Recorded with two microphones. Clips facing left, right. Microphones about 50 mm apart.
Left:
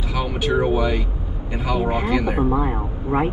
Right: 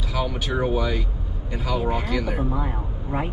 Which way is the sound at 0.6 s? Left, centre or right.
Centre.